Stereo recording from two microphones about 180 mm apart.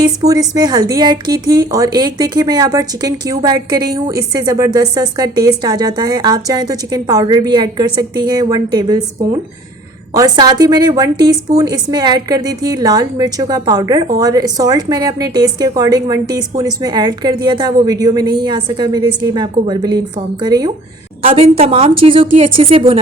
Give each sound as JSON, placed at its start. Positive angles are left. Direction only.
{"t": 0.0, "sound": "speech", "side_deg": -20}
{"t": 21.2, "sound": "a woman's voice", "side_deg": -35}